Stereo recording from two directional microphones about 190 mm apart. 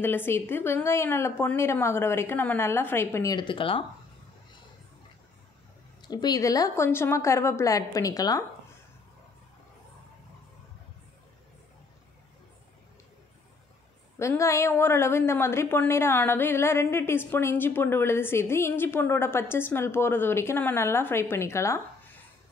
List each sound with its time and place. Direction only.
0.0 s a woman's voice: 10° left (ahead or behind); by 3.8 s 25° left (ahead or behind)
6.0 s a woman's voice: 20° left (ahead or behind)
14.1 s a woman's voice: 15° left (ahead or behind)